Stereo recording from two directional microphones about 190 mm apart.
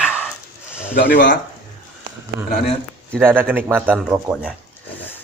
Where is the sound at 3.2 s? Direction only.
10° right (ahead or behind).